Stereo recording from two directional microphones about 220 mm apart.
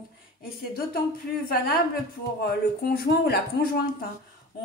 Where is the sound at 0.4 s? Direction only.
40° left (ahead or behind).